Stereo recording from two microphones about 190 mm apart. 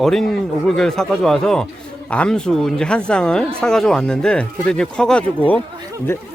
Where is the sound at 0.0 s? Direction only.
Centre (ahead or behind).